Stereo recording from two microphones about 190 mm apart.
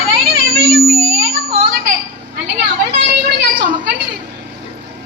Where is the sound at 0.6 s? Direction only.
55° right (ahead or behind).